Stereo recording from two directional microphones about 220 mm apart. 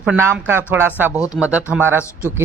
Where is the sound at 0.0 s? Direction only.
10° right (ahead or behind).